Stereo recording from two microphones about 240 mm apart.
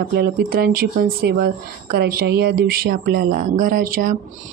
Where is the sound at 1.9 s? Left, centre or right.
Right.